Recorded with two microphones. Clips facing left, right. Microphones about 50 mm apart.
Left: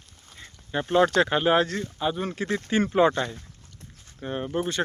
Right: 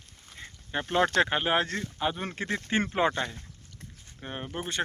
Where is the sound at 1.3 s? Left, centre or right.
Centre.